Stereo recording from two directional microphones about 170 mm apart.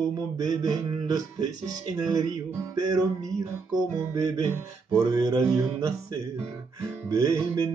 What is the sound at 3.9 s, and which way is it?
Music, 20° right (ahead or behind).